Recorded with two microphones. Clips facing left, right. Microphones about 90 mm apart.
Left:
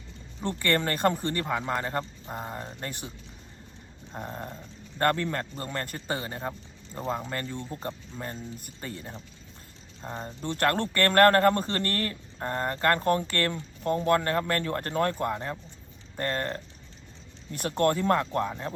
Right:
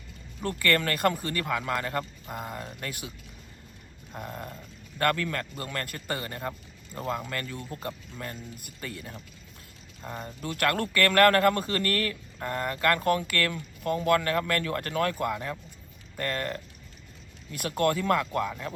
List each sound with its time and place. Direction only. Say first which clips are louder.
0.4 s speech: even; 25° left (ahead or behind)
4.1 s speech: left 1 dB; 30° left (ahead or behind)
17.8 s speech: left 1 dB; 30° left (ahead or behind)